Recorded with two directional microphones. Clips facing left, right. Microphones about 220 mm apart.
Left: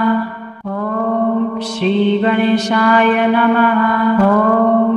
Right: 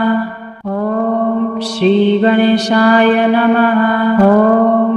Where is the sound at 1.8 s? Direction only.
35° right (ahead or behind).